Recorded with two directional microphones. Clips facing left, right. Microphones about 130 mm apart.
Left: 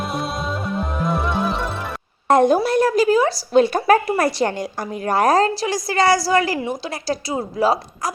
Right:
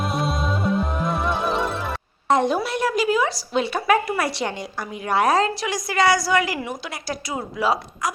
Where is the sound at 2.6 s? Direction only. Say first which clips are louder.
Left 6 dB; 40° left (ahead or behind).